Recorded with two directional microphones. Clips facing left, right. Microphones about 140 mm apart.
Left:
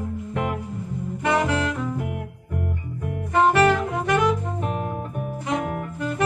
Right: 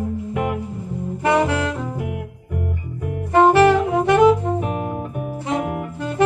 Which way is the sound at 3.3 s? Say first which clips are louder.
Right 5 dB; 30° right (ahead or behind).